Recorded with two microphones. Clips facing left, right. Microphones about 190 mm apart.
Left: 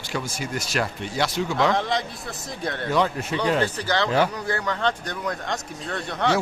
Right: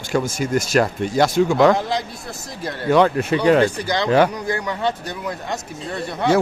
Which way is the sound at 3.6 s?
15° right (ahead or behind).